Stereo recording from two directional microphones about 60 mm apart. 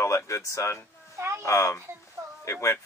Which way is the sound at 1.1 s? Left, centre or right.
Right.